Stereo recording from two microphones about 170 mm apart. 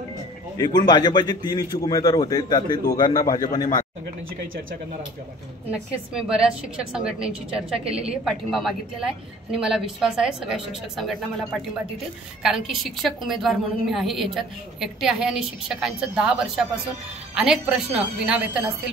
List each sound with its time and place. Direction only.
0.6 s a man's voice: 25° left (ahead or behind)
5.7 s a woman's voice: 5° right (ahead or behind)